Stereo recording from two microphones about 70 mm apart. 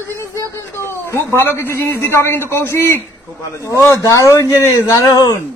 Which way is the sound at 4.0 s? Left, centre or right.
Left.